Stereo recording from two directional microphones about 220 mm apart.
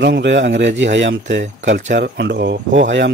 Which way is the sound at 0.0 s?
50° right (ahead or behind).